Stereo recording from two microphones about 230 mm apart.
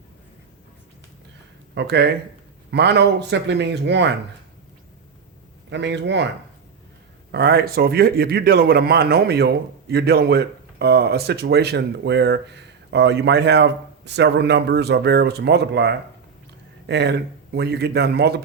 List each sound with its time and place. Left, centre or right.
1.7 s speech: right
5.7 s speech: right
7.3 s speech: right